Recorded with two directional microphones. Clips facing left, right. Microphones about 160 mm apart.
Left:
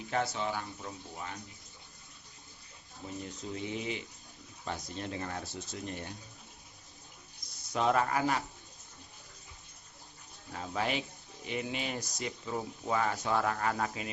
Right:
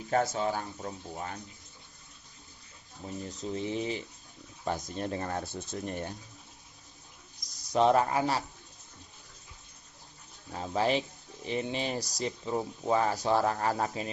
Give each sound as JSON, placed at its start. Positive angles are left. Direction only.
{"t": 0.1, "sound": "speech", "side_deg": -40}
{"t": 3.2, "sound": "speech", "side_deg": -35}
{"t": 7.6, "sound": "speech", "side_deg": -35}
{"t": 10.5, "sound": "speech", "side_deg": -30}